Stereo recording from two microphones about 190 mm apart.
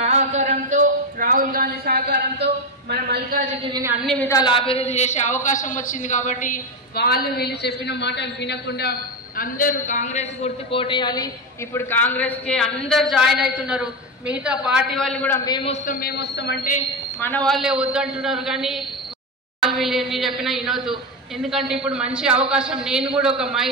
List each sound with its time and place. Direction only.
0.0 s a sound: 40° right (ahead or behind); by 3.4 s 55° right (ahead or behind)
3.7 s a woman's voice: 15° right (ahead or behind)
4.0 s a woman's voice: centre (ahead or behind)
4.3 s a man's voice: 25° left (ahead or behind); by 8.9 s 60° left (ahead or behind)
9.4 s a man's voice: 45° left (ahead or behind); by 11.2 s 25° left (ahead or behind)
11.7 s a woman's voice: 10° left (ahead or behind)
15.3 s a man's voice: 20° left (ahead or behind)
15.9 s a man's voice: 55° left (ahead or behind)
17.2 s a woman's voice: 5° left (ahead or behind)